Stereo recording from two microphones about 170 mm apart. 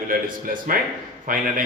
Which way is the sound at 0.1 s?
55° right (ahead or behind).